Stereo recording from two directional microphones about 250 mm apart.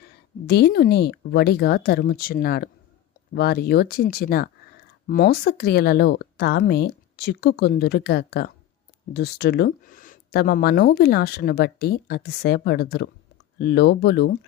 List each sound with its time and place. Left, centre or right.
0.4 s speech: left